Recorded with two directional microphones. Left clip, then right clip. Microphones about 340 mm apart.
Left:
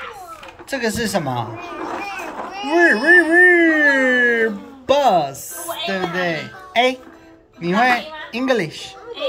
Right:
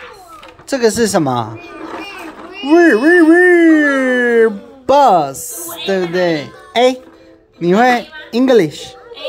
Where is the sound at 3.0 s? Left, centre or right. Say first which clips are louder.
Right 3 dB; centre.